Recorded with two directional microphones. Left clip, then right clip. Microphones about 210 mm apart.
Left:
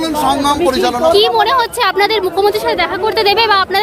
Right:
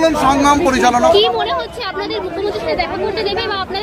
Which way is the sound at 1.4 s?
35° left (ahead or behind).